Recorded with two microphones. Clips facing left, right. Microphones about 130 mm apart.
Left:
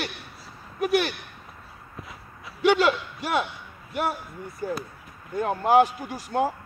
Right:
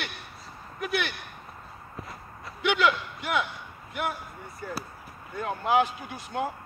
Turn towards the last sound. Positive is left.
turn(degrees=40)  # may be behind; listen again after turning